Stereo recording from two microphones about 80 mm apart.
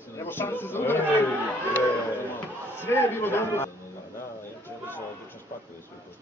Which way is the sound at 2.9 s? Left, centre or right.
Left.